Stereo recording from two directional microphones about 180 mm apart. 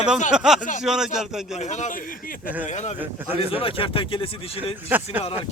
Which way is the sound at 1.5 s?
40° left (ahead or behind).